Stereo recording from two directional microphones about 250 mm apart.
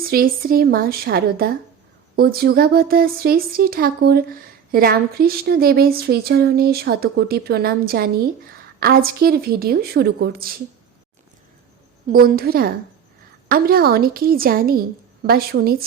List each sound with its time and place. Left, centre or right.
0.0 s speech: right
12.0 s speech: right